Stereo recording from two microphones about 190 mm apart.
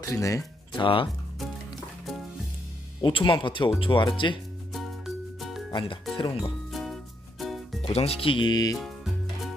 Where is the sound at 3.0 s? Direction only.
25° left (ahead or behind).